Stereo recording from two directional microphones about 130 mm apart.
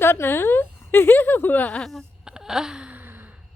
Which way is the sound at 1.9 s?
Centre (ahead or behind).